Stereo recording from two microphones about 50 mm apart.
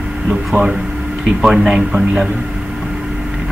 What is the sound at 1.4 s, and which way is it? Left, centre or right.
Speech, centre.